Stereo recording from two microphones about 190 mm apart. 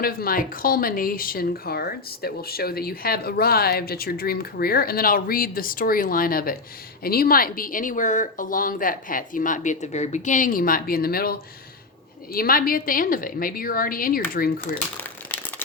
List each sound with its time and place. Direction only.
0.0 s speech: 50° left (ahead or behind)
14.9 s crumpling: 10° left (ahead or behind)